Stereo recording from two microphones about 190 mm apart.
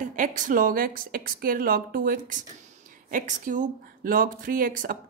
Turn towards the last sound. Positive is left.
turn(degrees=-50)  # may be behind; listen again after turning